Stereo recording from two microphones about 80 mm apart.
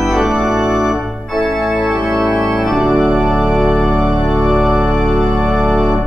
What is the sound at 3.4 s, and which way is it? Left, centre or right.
Music, centre.